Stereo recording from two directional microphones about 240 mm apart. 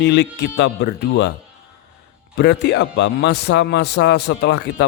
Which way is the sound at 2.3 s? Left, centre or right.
Left.